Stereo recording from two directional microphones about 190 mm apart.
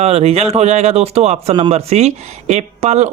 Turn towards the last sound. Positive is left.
turn(degrees=-35)  # may be behind; listen again after turning